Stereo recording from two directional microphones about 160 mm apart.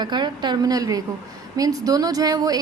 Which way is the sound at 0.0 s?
25° right (ahead or behind).